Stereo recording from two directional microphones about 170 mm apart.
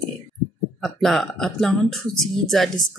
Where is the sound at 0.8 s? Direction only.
Centre (ahead or behind).